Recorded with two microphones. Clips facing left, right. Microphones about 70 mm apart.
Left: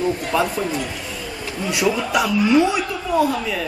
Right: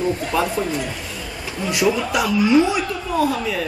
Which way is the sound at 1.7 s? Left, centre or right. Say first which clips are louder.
Right 1 dB; centre.